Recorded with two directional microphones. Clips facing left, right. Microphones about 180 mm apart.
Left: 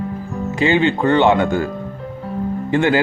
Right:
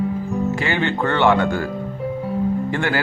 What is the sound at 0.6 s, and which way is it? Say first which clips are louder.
Speech: left 6 dB; 20° left (ahead or behind).